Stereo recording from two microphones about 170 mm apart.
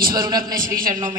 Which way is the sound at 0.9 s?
25° right (ahead or behind).